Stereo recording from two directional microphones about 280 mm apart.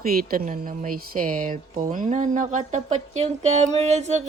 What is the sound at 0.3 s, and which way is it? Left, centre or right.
Speech, right.